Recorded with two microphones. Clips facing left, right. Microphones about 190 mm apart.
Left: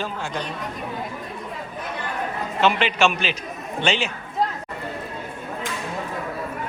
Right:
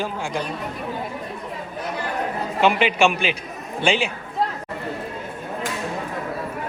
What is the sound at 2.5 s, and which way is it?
Speech, 10° right (ahead or behind).